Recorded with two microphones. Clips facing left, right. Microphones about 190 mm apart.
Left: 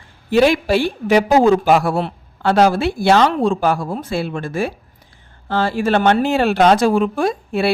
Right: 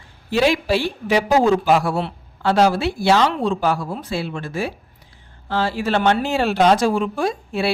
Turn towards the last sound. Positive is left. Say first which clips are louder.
# left 3 dB
turn(degrees=55)  # may be behind; listen again after turning